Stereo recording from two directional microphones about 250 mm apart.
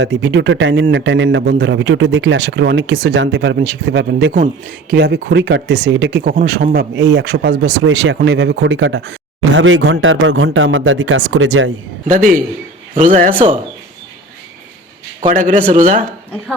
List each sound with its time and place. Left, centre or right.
0.0 s speech: right
6.2 s speech: right
12.1 s a man's voice: right
15.3 s speech: right